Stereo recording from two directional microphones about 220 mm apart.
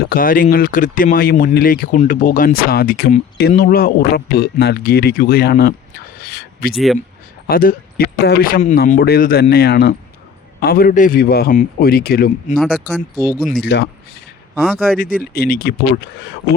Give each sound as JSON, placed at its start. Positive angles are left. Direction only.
{"t": 0.1, "sound": "speech", "side_deg": 40}
{"t": 6.1, "sound": "a sound", "side_deg": 45}
{"t": 6.7, "sound": "speech", "side_deg": 0}
{"t": 7.4, "sound": "a man's voice", "side_deg": 40}
{"t": 12.5, "sound": "speech", "side_deg": 0}
{"t": 13.6, "sound": "a man's voice", "side_deg": 50}
{"t": 14.9, "sound": "a man's voice", "side_deg": 40}